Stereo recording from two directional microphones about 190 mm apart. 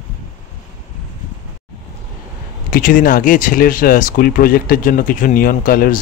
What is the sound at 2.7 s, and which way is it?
Speech, 45° left (ahead or behind).